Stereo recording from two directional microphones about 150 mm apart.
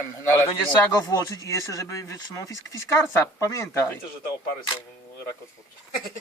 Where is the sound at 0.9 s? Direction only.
25° left (ahead or behind).